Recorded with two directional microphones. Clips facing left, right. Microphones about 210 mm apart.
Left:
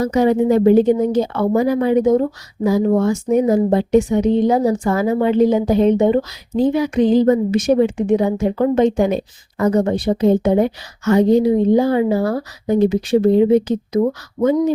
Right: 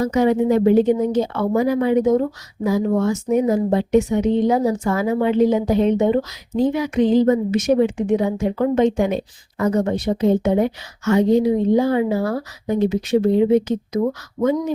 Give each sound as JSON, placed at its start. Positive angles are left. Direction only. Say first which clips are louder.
{"t": 0.0, "sound": "a woman's voice", "louder": "left 2 dB", "side_deg": 35}